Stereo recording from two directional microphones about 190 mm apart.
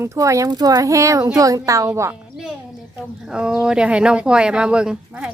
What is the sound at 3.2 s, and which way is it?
Speech, 5° right (ahead or behind).